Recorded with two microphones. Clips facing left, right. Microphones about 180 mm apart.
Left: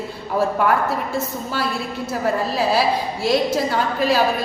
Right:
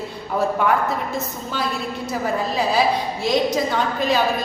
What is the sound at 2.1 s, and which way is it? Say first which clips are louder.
A woman's voice: left 2 dB; 5° left (ahead or behind).